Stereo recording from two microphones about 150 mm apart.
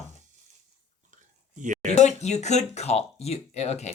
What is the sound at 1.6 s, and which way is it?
Speech, 55° right (ahead or behind).